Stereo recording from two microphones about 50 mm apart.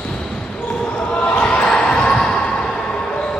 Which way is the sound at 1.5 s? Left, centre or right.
Centre.